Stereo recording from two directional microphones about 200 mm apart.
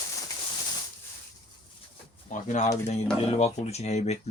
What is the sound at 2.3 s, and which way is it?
Speech, 35° left (ahead or behind).